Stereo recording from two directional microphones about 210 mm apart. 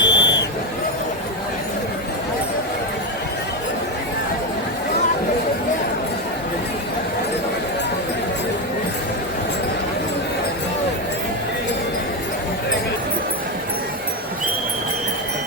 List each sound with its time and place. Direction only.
0.0 s buzzer: 55° left (ahead or behind)